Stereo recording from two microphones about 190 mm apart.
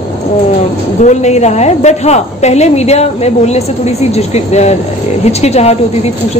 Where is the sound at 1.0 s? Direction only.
40° left (ahead or behind).